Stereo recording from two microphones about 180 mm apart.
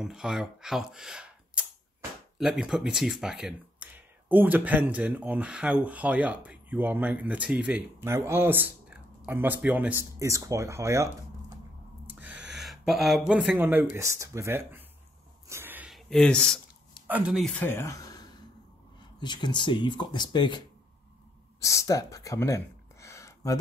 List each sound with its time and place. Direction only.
0.0 s speech: 5° right (ahead or behind)
12.2 s gasp: 10° right (ahead or behind)
12.5 s a sound: centre (ahead or behind)
13.3 s speech: 5° right (ahead or behind)
15.4 s a sound: 15° right (ahead or behind)
16.1 s speech: 5° left (ahead or behind)
17.6 s speech: 15° left (ahead or behind)